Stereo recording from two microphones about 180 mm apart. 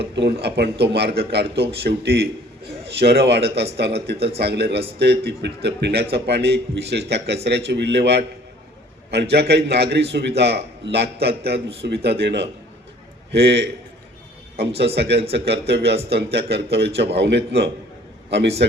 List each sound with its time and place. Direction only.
0.0 s a man's voice: 65° right (ahead or behind)
9.3 s a man's voice: 65° right (ahead or behind)
14.9 s a man's voice: 70° right (ahead or behind)